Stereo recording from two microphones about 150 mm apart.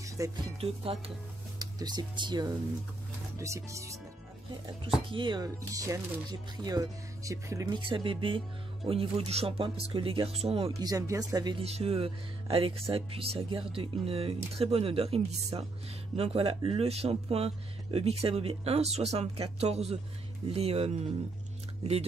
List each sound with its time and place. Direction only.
0.2 s speech: 20° right (ahead or behind)
0.6 s speech: 40° right (ahead or behind)
1.6 s speech: 25° right (ahead or behind)
5.1 s speech: 30° right (ahead or behind)
7.9 s speech: 35° right (ahead or behind)
10.8 s speech: 25° right (ahead or behind)
11.6 s speech: 45° right (ahead or behind)